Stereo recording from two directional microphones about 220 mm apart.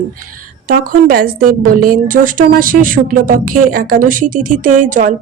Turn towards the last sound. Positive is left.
turn(degrees=-35)  # may be behind; listen again after turning